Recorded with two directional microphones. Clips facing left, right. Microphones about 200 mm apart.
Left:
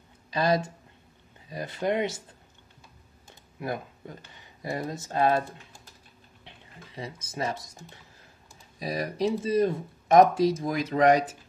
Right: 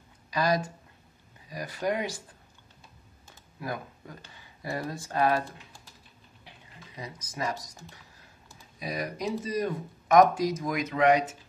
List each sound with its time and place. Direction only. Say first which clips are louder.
0.3 s speech: left 2 dB; 25° left (ahead or behind)
3.5 s speech: left 3 dB; 25° left (ahead or behind)
7.0 s speech: left 2 dB; 25° left (ahead or behind)